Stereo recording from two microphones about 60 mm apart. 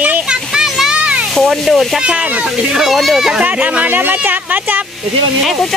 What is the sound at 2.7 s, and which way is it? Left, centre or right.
Speech, centre.